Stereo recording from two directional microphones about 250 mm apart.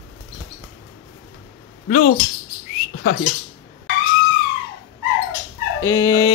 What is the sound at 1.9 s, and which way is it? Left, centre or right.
Speech, left.